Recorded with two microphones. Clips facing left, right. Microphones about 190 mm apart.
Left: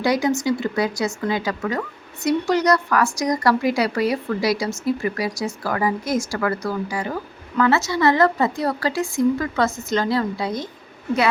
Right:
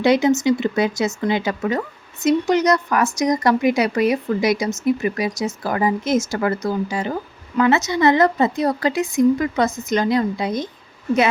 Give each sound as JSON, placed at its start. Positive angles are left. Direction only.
{"t": 0.0, "sound": "a woman's voice", "side_deg": -25}